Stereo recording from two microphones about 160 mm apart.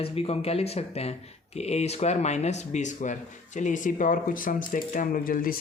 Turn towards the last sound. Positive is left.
turn(degrees=60)  # may be behind; listen again after turning